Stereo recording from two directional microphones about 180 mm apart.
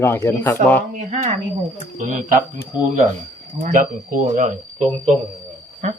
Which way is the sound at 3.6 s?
50° right (ahead or behind).